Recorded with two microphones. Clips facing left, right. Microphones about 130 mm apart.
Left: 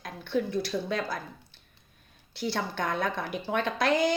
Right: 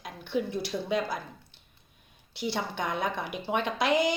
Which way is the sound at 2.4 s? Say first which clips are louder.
Left 1 dB; 20° right (ahead or behind).